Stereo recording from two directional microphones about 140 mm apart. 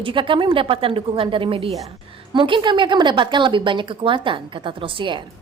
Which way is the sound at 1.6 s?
Centre (ahead or behind).